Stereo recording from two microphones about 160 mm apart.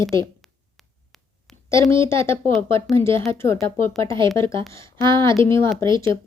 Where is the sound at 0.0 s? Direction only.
20° left (ahead or behind).